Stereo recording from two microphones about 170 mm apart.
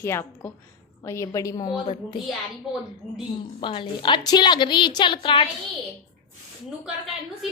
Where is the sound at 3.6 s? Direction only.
30° left (ahead or behind).